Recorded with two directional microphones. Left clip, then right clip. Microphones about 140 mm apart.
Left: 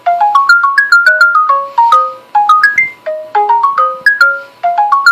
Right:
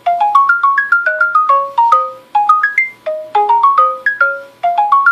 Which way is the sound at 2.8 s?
25° right (ahead or behind).